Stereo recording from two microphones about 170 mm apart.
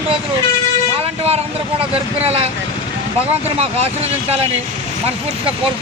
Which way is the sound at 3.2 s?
35° right (ahead or behind).